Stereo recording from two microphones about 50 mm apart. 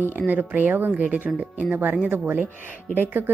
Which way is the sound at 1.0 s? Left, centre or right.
Right.